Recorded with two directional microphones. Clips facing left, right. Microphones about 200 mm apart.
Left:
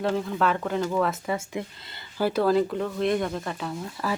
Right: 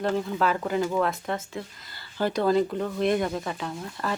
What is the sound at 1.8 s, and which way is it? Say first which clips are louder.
Speech: left 2 dB; 25° left (ahead or behind).